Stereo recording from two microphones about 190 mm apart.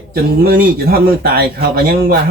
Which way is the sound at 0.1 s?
50° right (ahead or behind).